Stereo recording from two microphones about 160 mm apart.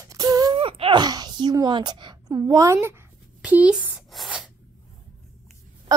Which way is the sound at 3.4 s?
10° right (ahead or behind).